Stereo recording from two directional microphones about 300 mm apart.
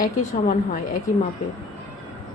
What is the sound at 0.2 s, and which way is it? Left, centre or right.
Speech, left.